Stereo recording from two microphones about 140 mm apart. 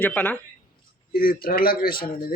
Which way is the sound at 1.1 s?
90° left.